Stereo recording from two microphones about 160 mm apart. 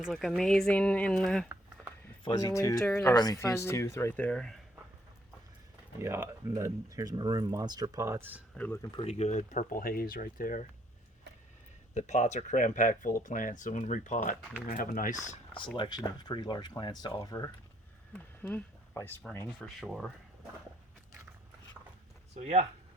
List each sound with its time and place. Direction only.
0.0 s speech: centre (ahead or behind)
2.2 s speech: 25° left (ahead or behind); by 4.6 s 5° left (ahead or behind)
6.0 s speech: 15° right (ahead or behind)
8.5 s speech: 15° left (ahead or behind)
9.0 s speech: 45° left (ahead or behind); by 10.7 s 60° left (ahead or behind)
11.9 s speech: 45° left (ahead or behind)
15.8 s speech: 25° left (ahead or behind)
18.1 s a sound: 10° left (ahead or behind)
19.5 s speech: centre (ahead or behind)
22.4 s speech: 40° right (ahead or behind)